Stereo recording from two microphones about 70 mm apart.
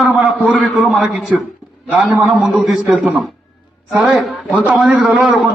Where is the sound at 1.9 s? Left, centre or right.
Centre.